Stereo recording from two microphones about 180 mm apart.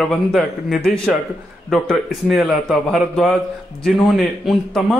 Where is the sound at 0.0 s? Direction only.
Centre (ahead or behind).